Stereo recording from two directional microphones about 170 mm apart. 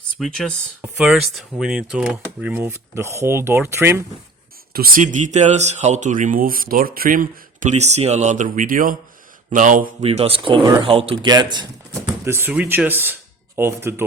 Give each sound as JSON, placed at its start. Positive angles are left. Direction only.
{"t": 0.2, "sound": "speech", "side_deg": 5}
{"t": 4.7, "sound": "speech", "side_deg": -55}
{"t": 10.0, "sound": "speech", "side_deg": -35}
{"t": 12.0, "sound": "speech", "side_deg": -15}